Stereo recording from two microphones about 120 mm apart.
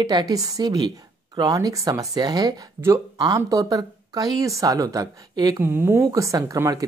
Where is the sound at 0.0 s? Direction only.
35° right (ahead or behind).